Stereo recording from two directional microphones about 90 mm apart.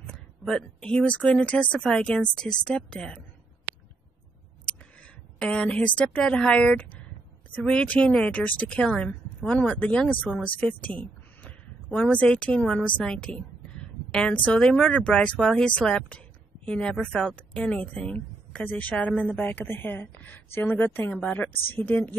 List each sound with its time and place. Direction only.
0.5 s a woman's voice: 10° left (ahead or behind)
5.4 s a woman's voice: 10° left (ahead or behind)
21.1 s a woman's voice: 10° left (ahead or behind)
21.4 s a woman's voice: 20° left (ahead or behind)